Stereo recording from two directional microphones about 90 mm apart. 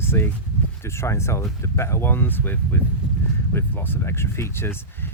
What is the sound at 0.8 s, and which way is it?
Speech, 30° left (ahead or behind).